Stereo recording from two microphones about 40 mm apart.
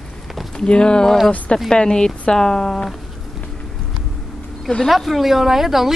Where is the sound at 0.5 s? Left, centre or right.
Left.